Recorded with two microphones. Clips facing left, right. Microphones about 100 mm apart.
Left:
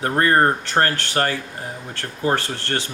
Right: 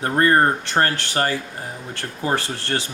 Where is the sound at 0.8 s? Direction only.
25° right (ahead or behind).